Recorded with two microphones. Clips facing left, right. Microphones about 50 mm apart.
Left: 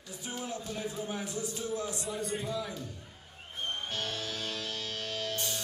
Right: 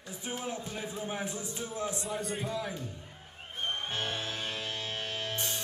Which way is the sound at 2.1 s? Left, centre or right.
Centre.